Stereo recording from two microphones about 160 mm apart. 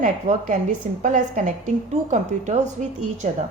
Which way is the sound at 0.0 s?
50° right (ahead or behind).